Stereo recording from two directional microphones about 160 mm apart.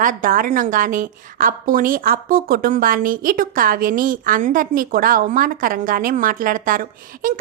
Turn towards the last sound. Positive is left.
turn(degrees=-60)  # may be behind; listen again after turning